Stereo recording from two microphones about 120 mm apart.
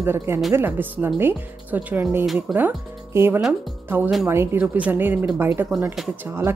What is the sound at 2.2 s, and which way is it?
Speech, centre (ahead or behind).